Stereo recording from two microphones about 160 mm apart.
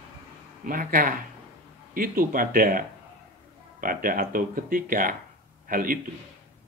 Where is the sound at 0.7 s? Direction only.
60° right (ahead or behind).